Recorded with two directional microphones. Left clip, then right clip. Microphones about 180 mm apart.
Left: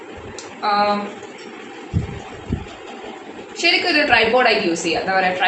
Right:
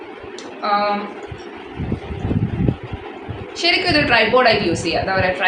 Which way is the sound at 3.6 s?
15° right (ahead or behind).